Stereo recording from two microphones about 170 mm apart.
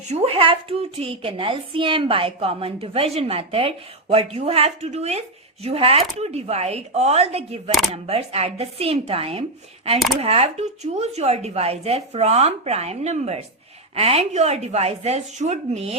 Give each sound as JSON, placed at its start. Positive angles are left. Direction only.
{"t": 0.1, "sound": "a woman's voice", "side_deg": -35}